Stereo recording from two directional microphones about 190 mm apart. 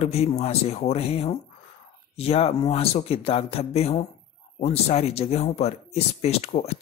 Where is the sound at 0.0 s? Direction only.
35° left (ahead or behind).